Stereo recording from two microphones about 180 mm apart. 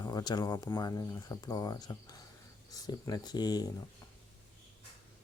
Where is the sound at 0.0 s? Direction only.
20° left (ahead or behind).